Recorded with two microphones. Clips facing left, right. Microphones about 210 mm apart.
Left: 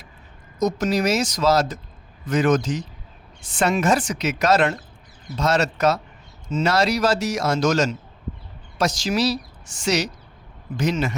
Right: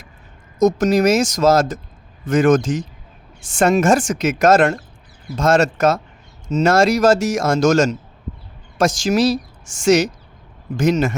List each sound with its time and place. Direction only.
0.6 s speech: 45° right (ahead or behind)